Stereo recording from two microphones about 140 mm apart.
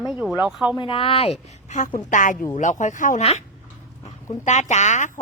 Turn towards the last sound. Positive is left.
turn(degrees=60)  # may be behind; listen again after turning